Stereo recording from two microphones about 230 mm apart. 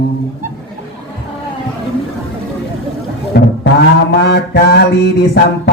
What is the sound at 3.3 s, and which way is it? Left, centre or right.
Speech, left.